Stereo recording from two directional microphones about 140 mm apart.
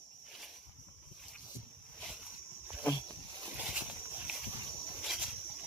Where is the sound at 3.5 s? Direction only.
10° right (ahead or behind).